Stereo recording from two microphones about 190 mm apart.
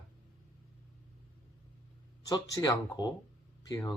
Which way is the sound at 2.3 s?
20° left (ahead or behind).